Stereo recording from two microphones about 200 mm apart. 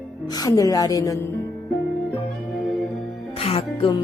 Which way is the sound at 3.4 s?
30° left (ahead or behind).